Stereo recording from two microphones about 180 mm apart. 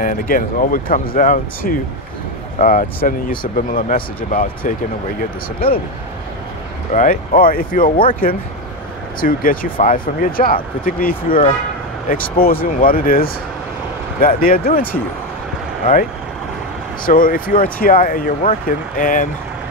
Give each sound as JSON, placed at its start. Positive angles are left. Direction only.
{"t": 0.0, "sound": "speech", "side_deg": 50}
{"t": 6.9, "sound": "speech", "side_deg": 50}
{"t": 17.0, "sound": "speech", "side_deg": 50}